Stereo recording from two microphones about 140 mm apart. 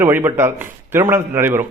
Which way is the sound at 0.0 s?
15° right (ahead or behind).